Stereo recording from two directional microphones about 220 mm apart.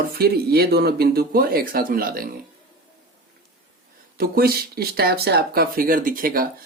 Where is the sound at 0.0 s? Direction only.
45° right (ahead or behind).